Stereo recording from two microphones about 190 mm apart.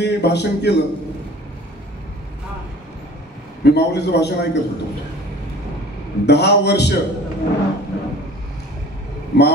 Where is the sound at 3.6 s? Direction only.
60° left (ahead or behind).